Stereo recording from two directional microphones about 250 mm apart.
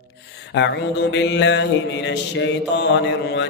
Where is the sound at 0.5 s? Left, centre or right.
Left.